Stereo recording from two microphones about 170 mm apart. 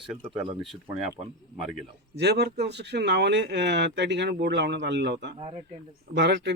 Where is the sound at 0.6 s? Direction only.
Centre (ahead or behind).